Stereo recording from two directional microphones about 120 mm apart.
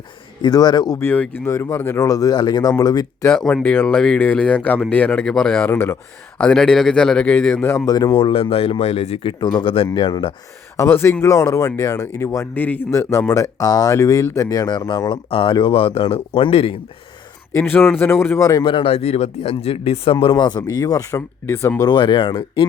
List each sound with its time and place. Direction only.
0.4 s speech: 35° left (ahead or behind)
0.9 s speech: 15° left (ahead or behind)
2.0 s speech: 30° left (ahead or behind)
3.3 s speech: 5° left (ahead or behind)
6.4 s speech: 5° left (ahead or behind)
7.9 s speech: 35° left (ahead or behind)
8.1 s speech: 50° left (ahead or behind)
9.4 s speech: 40° left (ahead or behind)
10.8 s speech: 20° left (ahead or behind); by 16.7 s 50° left (ahead or behind)
17.6 s speech: 5° left (ahead or behind); by 18.6 s 25° left (ahead or behind)
18.6 s speech: 45° left (ahead or behind)
18.9 s speech: 60° left (ahead or behind)
20.1 s speech: 35° left (ahead or behind); by 21.8 s 20° left (ahead or behind)
21.8 s speech: 40° left (ahead or behind)